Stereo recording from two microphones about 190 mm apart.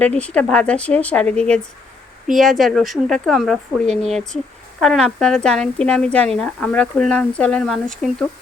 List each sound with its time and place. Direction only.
0.0 s speech: 5° left (ahead or behind)